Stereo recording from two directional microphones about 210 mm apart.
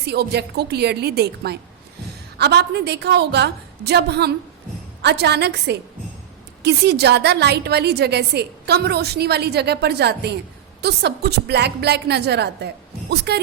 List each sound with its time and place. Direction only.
0.0 s a woman's voice: 50° right (ahead or behind)